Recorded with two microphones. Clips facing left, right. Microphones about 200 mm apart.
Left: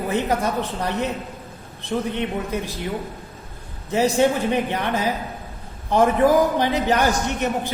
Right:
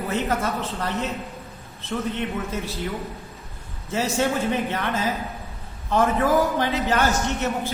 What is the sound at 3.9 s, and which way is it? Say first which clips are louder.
A man's voice: left 5 dB; 15° left (ahead or behind).